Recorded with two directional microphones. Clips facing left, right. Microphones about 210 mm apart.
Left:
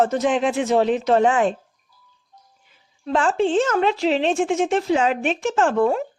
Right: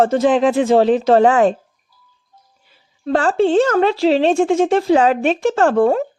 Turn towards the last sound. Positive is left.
turn(degrees=-40)  # may be behind; listen again after turning